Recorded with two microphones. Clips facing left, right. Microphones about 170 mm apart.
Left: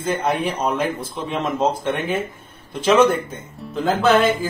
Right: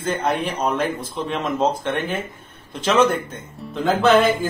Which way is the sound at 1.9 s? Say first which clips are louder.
Left 2 dB; 10° left (ahead or behind).